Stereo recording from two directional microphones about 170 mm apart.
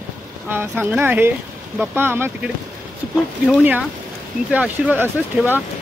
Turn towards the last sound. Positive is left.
turn(degrees=-10)  # may be behind; listen again after turning